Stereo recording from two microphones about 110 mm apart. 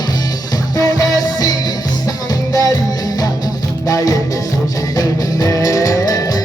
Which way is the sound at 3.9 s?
30° left (ahead or behind).